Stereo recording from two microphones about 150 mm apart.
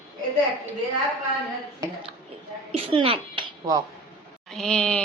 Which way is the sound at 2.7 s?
35° right (ahead or behind).